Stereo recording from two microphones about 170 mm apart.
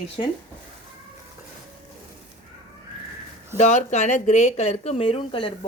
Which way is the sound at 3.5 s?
40° left (ahead or behind).